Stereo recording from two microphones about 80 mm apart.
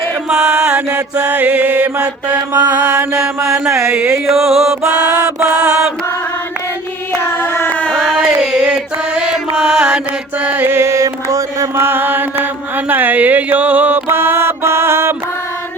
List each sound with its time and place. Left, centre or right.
0.3 s music: centre
1.1 s mantra: centre
2.5 s mantra: right
3.7 s a sound: right
4.3 s music: centre
5.4 s mantra: centre
7.3 s a sound: left
7.9 s a sound: centre
8.4 s mantra: centre
9.6 s music: centre
10.4 s mantra: right
10.8 s mantra: right
11.7 s mantra: right